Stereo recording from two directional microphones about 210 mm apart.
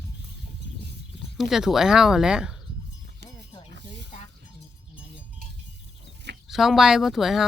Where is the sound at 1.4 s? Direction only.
Centre (ahead or behind).